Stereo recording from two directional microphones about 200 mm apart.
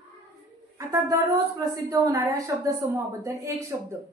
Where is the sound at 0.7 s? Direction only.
15° right (ahead or behind).